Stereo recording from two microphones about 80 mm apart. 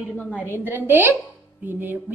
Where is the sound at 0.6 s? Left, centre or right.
Right.